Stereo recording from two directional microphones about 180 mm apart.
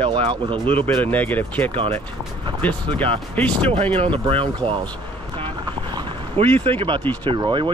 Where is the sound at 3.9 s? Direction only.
30° right (ahead or behind).